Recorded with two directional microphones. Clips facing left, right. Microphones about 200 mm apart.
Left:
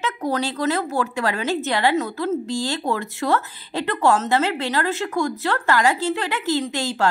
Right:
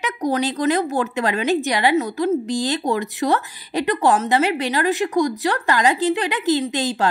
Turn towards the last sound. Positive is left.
turn(degrees=-20)  # may be behind; listen again after turning